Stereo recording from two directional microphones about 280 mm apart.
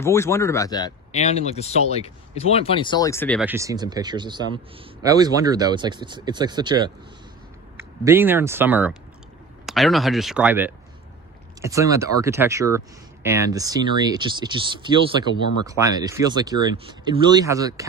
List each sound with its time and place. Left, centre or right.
0.0 s speech: centre
3.4 s speech: centre